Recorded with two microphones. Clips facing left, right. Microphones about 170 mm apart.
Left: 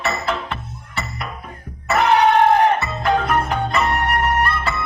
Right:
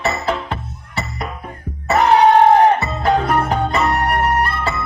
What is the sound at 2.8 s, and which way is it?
Music, 35° right (ahead or behind).